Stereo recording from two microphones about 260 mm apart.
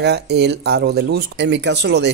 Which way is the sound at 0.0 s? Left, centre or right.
Right.